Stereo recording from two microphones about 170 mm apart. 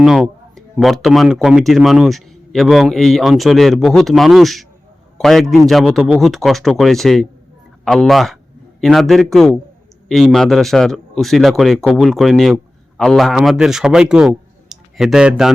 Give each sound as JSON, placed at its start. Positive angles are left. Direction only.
{"t": 0.0, "sound": "a man's voice", "side_deg": 0}